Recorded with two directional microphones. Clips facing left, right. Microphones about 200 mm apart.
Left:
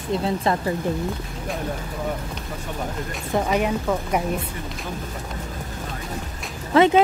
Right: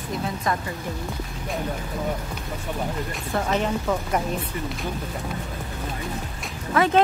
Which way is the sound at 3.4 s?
10° left (ahead or behind).